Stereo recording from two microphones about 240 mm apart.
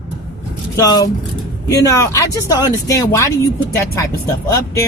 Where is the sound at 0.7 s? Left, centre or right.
Centre.